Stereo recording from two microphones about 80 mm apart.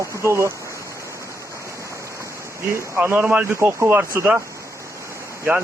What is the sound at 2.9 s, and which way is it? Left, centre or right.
Speech, centre.